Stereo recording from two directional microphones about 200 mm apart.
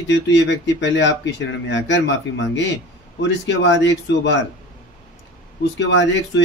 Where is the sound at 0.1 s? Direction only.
65° left (ahead or behind).